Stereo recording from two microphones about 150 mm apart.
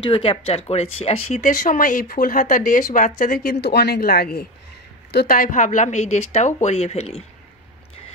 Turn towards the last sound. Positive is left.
turn(degrees=40)  # may be behind; listen again after turning